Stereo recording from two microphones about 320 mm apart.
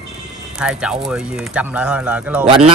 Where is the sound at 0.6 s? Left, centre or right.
Centre.